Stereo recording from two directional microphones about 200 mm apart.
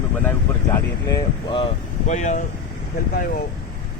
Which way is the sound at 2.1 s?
35° left (ahead or behind).